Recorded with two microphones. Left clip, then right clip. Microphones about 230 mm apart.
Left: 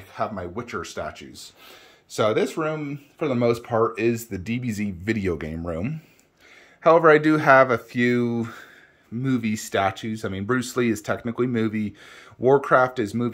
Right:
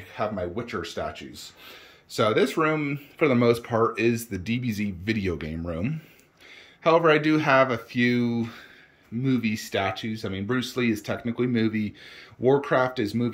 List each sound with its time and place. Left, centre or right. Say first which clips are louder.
0.1 s speech: even; centre